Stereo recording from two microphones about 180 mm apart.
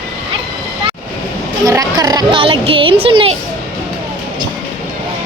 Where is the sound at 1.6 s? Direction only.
20° right (ahead or behind).